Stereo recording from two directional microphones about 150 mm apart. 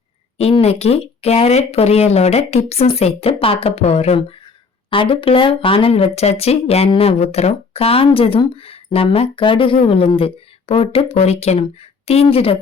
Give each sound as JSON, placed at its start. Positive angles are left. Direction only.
{"t": 0.3, "sound": "speech", "side_deg": 45}